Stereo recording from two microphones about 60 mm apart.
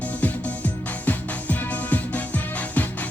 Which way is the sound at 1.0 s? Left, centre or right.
Left.